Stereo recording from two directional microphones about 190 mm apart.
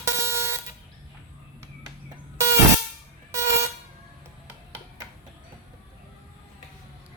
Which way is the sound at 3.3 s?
15° right (ahead or behind).